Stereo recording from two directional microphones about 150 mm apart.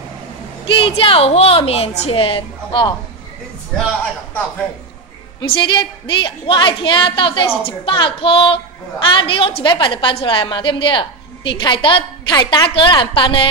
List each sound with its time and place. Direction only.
0.7 s a woman's voice: 35° left (ahead or behind)
5.4 s a woman's voice: 35° left (ahead or behind)